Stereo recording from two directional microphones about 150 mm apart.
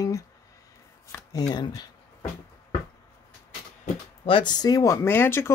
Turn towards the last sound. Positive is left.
turn(degrees=15)  # may be behind; listen again after turning